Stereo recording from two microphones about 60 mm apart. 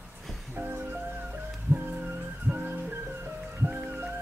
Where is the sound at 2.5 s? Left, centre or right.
Right.